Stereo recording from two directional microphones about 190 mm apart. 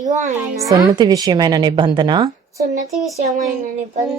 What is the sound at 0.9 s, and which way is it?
A woman's voice, 20° right (ahead or behind).